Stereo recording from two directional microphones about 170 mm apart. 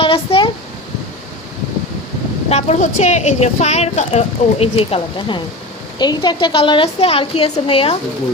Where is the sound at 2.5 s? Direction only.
45° left (ahead or behind).